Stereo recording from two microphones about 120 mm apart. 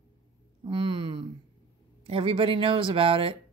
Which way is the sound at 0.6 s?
45° right (ahead or behind).